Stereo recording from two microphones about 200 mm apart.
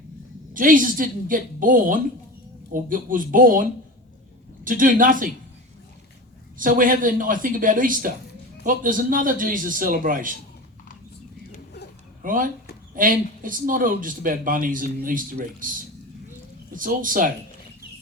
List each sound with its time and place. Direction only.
0.5 s speech: 40° right (ahead or behind)
6.6 s speech: 45° right (ahead or behind)
12.2 s speech: 45° right (ahead or behind)
16.7 s speech: 45° right (ahead or behind)